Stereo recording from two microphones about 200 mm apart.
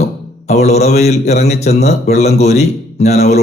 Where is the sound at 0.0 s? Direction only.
35° left (ahead or behind).